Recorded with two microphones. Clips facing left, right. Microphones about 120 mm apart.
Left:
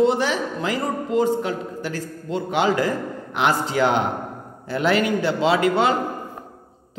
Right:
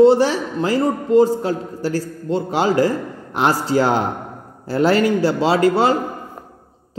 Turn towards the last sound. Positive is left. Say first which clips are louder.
# right 3 dB
turn(degrees=-35)  # may be behind; listen again after turning